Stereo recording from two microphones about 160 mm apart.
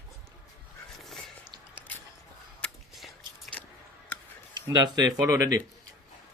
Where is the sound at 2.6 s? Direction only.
5° left (ahead or behind).